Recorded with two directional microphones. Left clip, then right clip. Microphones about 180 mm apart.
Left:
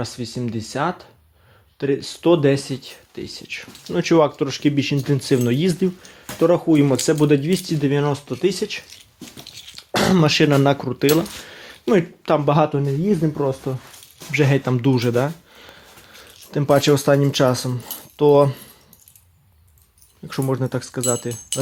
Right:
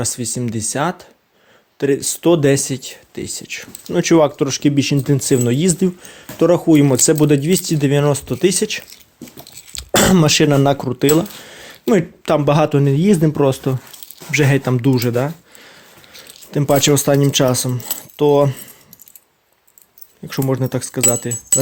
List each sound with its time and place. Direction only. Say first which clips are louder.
0.0 s speech: right 5 dB; 30° right (ahead or behind)
9.4 s a sound: left 1 dB; 20° right (ahead or behind)
9.7 s a sound: right 5 dB; 40° right (ahead or behind)
10.2 s speech: right 3 dB; 20° right (ahead or behind)
11.3 s a sound: right 1 dB; 15° right (ahead or behind)
12.2 s speech: right 4 dB; 30° right (ahead or behind)
12.9 s speech: right 6 dB; 55° right (ahead or behind)
14.4 s speech: right 2 dB; 20° right (ahead or behind)
20.2 s speech: right 3 dB; 20° right (ahead or behind)